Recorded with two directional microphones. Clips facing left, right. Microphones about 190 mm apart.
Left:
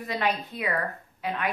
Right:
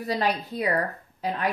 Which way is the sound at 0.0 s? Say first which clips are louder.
Right 2 dB; 35° right (ahead or behind).